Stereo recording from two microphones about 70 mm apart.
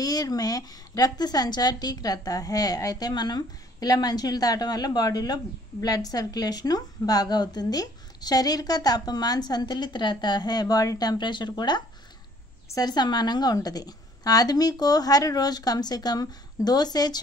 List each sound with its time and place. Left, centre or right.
0.0 s a woman's voice: left